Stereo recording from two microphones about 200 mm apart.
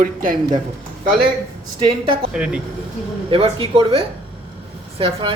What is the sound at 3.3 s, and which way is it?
A woman's voice, 25° right (ahead or behind).